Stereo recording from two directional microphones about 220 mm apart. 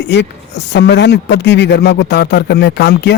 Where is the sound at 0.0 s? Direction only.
50° left (ahead or behind).